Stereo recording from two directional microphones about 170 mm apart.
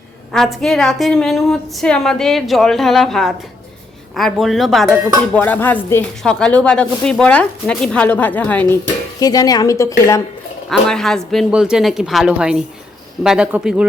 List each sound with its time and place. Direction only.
0.3 s a woman's voice: centre (ahead or behind)
9.2 s speech: 20° left (ahead or behind)
10.7 s a woman's voice: 5° left (ahead or behind)